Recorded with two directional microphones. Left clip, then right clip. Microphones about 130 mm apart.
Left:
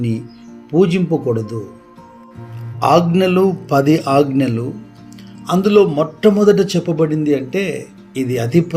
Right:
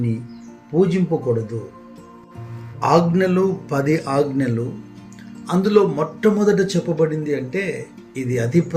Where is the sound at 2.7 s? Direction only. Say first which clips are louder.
Left 4 dB; 40° left (ahead or behind).